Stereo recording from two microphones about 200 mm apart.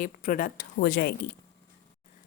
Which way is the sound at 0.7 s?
60° left (ahead or behind).